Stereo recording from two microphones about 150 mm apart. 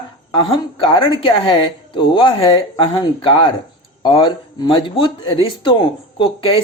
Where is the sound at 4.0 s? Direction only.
35° left (ahead or behind).